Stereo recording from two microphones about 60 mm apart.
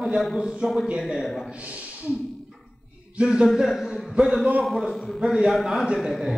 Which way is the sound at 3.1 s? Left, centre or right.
Centre.